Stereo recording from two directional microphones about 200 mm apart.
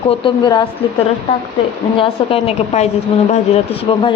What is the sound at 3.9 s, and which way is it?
Speech, 30° left (ahead or behind).